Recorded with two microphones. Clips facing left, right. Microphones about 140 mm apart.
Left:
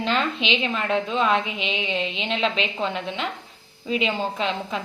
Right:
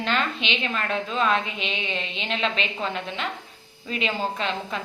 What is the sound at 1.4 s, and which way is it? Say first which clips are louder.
Speech: left 3 dB; 90° left.